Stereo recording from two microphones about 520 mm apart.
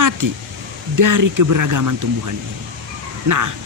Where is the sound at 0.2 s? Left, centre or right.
Right.